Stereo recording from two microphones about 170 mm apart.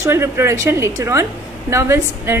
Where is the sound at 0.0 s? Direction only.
15° right (ahead or behind).